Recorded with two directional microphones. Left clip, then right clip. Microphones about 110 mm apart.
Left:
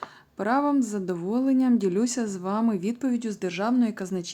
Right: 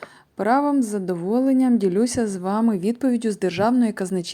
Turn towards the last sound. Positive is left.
turn(degrees=-50)  # may be behind; listen again after turning